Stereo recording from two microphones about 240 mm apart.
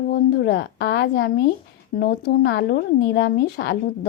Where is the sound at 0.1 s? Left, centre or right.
Left.